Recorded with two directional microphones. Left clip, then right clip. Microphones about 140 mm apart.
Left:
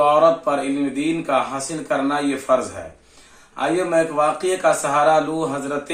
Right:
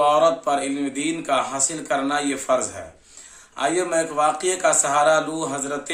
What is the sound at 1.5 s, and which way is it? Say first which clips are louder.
Speech: left 1 dB; 15° right (ahead or behind).